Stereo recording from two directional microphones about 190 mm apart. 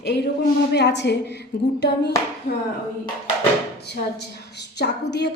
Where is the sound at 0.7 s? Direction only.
65° left (ahead or behind).